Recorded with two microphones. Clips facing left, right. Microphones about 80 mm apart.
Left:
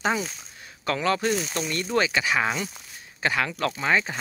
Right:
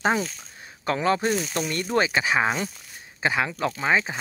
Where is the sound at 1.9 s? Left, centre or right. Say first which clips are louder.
Right 1 dB; right.